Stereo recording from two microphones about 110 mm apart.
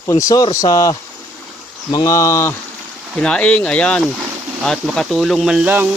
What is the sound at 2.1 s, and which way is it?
Speech, 30° left (ahead or behind).